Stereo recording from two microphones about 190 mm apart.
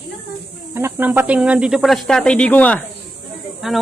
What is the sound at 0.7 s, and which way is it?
Speech, 10° right (ahead or behind).